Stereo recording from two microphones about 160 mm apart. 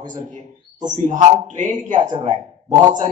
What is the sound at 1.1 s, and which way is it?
Speech, 50° right (ahead or behind).